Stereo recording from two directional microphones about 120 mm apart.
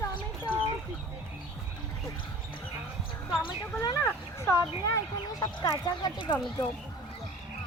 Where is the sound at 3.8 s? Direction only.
25° left (ahead or behind).